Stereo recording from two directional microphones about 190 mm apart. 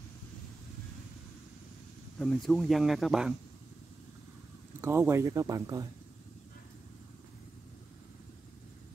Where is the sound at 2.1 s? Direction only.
5° left (ahead or behind).